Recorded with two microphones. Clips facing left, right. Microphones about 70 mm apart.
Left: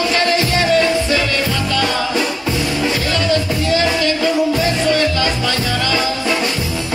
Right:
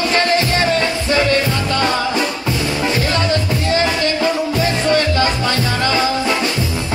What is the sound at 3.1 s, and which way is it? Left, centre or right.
Music, right.